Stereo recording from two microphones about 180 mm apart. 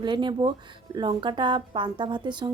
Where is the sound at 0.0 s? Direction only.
25° right (ahead or behind).